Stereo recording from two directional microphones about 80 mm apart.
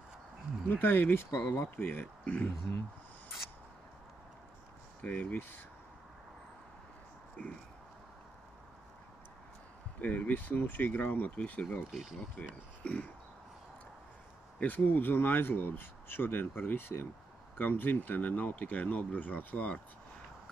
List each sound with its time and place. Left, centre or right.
0.7 s speech: left
2.2 s speech: centre
5.0 s speech: left
10.0 s speech: left
11.9 s speech: centre
12.8 s a sound: centre
14.6 s speech: left